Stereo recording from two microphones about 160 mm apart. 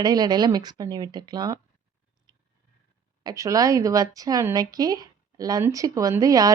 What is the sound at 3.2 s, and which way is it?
A woman's voice, 20° right (ahead or behind).